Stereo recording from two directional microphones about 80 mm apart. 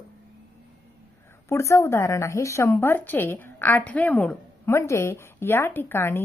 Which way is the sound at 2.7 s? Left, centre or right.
Left.